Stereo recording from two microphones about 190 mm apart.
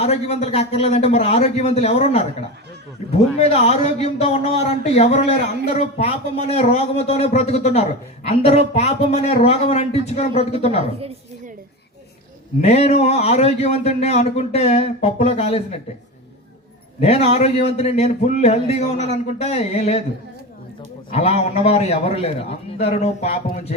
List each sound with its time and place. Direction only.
0.0 s a man's voice: 35° left (ahead or behind)
3.3 s a man's voice: 35° left (ahead or behind)
12.6 s a man's voice: 35° left (ahead or behind)
17.0 s a man's voice: 30° left (ahead or behind)
21.1 s a man's voice: 35° left (ahead or behind)